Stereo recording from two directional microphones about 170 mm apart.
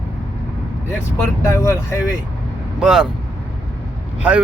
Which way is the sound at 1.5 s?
15° left (ahead or behind).